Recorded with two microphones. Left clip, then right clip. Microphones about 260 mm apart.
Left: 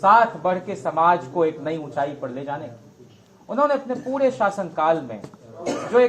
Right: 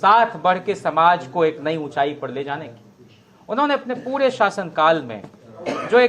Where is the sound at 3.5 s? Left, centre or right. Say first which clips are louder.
Right 1 dB; right.